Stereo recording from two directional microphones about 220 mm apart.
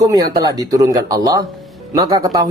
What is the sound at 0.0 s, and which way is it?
Speech, 15° right (ahead or behind).